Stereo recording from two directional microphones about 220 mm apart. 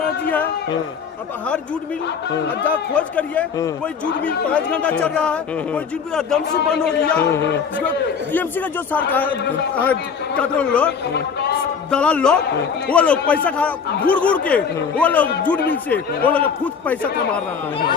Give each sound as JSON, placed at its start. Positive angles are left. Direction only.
{"t": 2.6, "sound": "a man's voice", "side_deg": 5}
{"t": 11.1, "sound": "speech", "side_deg": 50}
{"t": 11.9, "sound": "a man's voice", "side_deg": 5}